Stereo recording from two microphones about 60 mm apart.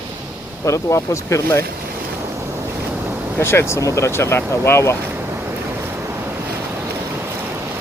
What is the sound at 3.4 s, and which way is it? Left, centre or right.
Speech, left.